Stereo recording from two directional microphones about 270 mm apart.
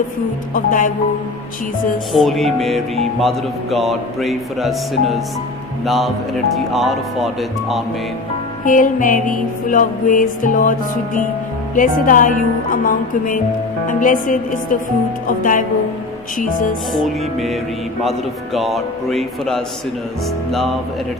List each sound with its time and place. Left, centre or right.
0.5 s music: left
2.1 s a man's voice: centre
8.6 s music: left
16.9 s a man's voice: centre